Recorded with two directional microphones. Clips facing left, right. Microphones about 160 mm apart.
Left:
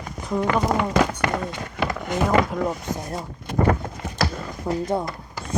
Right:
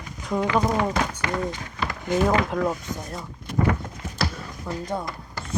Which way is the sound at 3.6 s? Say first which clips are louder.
Left 3 dB; 55° left (ahead or behind).